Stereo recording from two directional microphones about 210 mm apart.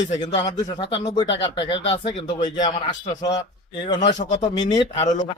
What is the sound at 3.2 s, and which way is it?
Speech, 20° left (ahead or behind).